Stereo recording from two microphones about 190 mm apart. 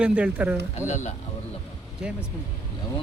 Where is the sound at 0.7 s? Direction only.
40° left (ahead or behind).